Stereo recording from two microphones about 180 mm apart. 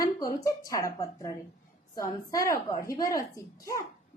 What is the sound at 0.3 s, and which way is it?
A woman's voice, 20° left (ahead or behind).